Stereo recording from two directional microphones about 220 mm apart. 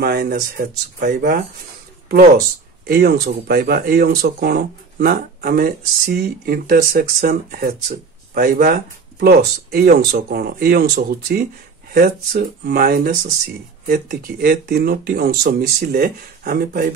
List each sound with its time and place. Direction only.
0.0 s speech: 45° right (ahead or behind)
2.9 s speech: 45° right (ahead or behind)